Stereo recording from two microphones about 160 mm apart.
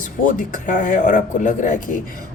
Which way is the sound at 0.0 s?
55° left (ahead or behind).